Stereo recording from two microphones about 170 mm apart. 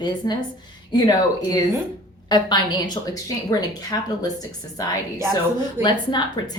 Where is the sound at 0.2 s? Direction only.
25° left (ahead or behind).